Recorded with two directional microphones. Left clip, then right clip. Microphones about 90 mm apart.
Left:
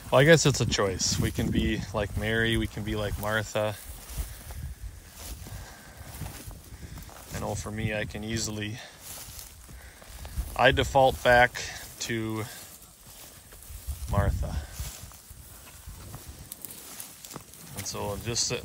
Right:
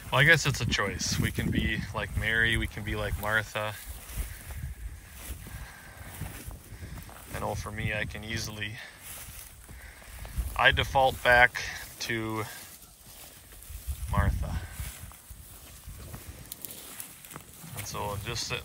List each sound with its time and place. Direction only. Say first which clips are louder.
0.1 s speech: left 3 dB; 75° left (ahead or behind)
0.8 s speech: left 3 dB; 55° left (ahead or behind)
1.6 s speech: left 2 dB; 65° left (ahead or behind)
2.2 s speech: right 2 dB; 50° left (ahead or behind)
2.6 s speech: left 2 dB; 35° left (ahead or behind)
3.4 s speech: left 4 dB; 55° left (ahead or behind)
4.1 s boat: left 1 dB; 5° left (ahead or behind)
6.1 s boat: left 2 dB; 5° left (ahead or behind)
7.5 s speech: left 1 dB; 45° left (ahead or behind)
10.5 s speech: left 2 dB; 55° left (ahead or behind); by 12.6 s 35° left (ahead or behind)
14.1 s a sound: left 2 dB; 40° left (ahead or behind)
16.4 s a sound: even; 5° left (ahead or behind)
17.8 s speech: left 1 dB; 40° left (ahead or behind)